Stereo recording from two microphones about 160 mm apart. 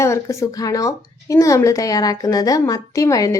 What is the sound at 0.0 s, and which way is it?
Speech, 20° left (ahead or behind).